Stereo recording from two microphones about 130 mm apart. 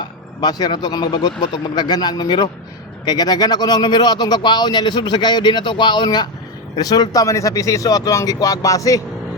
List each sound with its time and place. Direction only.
0.0 s speech: 30° left (ahead or behind)